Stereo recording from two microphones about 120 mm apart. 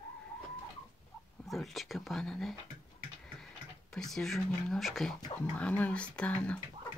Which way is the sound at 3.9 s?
5° left (ahead or behind).